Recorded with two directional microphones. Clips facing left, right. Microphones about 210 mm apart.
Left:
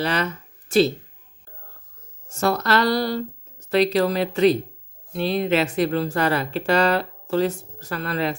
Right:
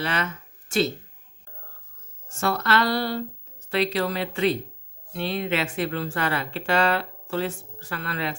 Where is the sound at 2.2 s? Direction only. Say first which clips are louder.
Left 4 dB; 40° left (ahead or behind).